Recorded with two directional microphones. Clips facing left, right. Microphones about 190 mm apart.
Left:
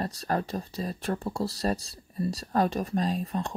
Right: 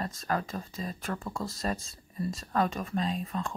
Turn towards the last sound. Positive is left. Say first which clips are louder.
# left 3 dB
turn(degrees=40)  # may be behind; listen again after turning